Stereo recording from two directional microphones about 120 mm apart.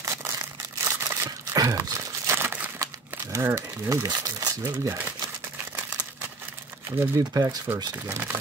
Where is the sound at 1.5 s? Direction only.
30° right (ahead or behind).